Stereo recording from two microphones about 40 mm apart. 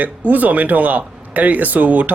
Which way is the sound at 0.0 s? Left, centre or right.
Right.